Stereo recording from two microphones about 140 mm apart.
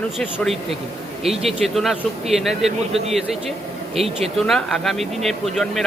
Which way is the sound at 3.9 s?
45° right (ahead or behind).